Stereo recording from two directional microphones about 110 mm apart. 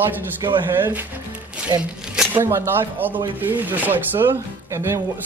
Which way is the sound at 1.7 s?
30° right (ahead or behind).